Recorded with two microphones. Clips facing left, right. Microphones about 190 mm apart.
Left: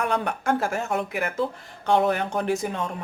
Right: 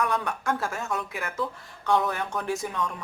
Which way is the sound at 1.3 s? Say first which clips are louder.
Left 5 dB; 25° left (ahead or behind).